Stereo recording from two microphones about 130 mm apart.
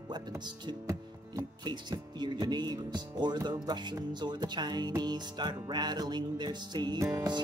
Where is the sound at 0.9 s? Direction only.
25° right (ahead or behind).